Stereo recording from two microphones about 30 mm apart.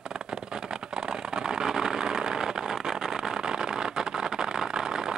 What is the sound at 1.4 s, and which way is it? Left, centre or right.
Vehicle, right.